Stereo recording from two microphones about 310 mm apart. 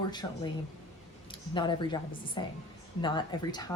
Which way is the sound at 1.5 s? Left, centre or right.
Centre.